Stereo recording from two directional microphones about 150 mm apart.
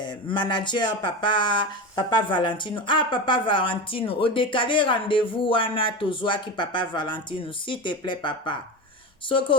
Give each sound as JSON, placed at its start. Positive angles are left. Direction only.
{"t": 0.0, "sound": "speech", "side_deg": 30}